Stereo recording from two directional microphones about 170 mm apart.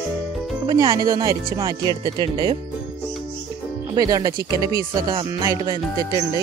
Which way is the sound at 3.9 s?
20° right (ahead or behind).